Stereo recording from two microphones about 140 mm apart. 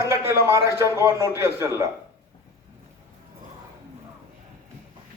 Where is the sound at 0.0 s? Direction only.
20° right (ahead or behind).